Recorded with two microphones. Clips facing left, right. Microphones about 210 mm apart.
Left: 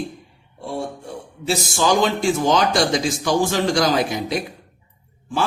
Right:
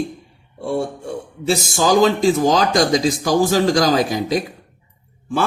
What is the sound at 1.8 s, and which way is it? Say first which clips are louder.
A man's voice: right 4 dB; 40° right (ahead or behind).